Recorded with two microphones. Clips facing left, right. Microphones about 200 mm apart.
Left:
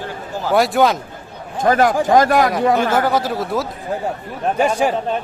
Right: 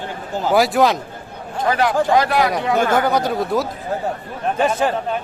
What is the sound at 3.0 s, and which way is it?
Speech, centre (ahead or behind).